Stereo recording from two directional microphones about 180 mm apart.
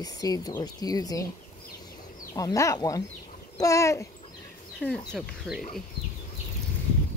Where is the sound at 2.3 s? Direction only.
20° left (ahead or behind).